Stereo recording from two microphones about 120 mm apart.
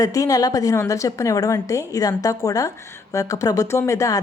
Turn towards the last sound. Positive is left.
turn(degrees=25)  # may be behind; listen again after turning